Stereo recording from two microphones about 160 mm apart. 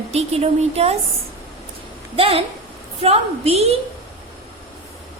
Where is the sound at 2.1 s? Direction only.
35° right (ahead or behind).